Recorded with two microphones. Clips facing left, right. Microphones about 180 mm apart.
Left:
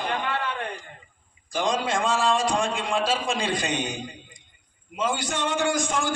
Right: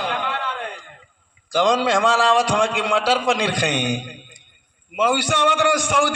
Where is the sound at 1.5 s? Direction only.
75° right (ahead or behind).